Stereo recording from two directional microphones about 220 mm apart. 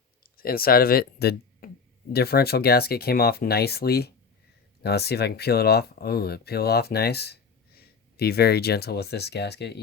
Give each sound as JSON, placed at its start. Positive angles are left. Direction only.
{"t": 0.2, "sound": "speech", "side_deg": 40}